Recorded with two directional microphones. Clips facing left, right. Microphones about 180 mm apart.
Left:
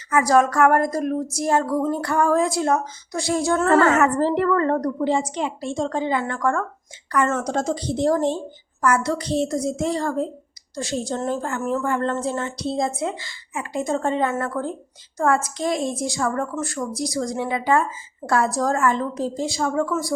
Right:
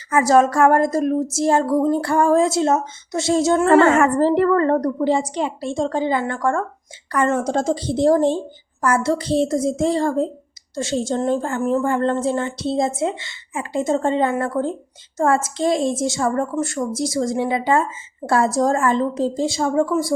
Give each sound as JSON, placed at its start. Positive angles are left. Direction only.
{"t": 0.1, "sound": "a woman's voice", "side_deg": -30}